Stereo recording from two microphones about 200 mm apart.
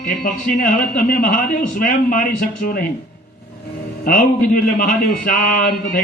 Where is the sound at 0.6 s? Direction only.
45° left (ahead or behind).